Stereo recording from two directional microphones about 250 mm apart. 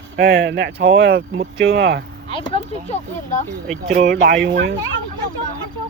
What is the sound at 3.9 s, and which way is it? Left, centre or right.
Speech, right.